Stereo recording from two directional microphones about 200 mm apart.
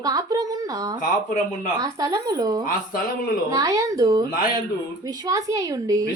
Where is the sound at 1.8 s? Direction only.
15° right (ahead or behind).